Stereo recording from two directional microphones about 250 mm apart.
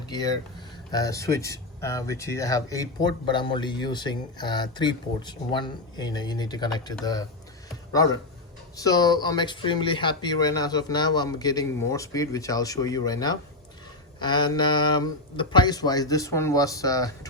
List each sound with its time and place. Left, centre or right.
0.1 s speech: centre